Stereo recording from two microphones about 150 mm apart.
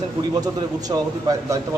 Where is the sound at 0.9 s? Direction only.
25° right (ahead or behind).